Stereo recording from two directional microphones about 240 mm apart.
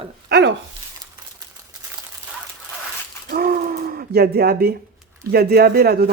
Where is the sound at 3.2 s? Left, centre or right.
Right.